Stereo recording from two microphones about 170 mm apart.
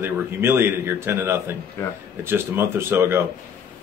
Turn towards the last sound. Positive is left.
turn(degrees=-15)  # may be behind; listen again after turning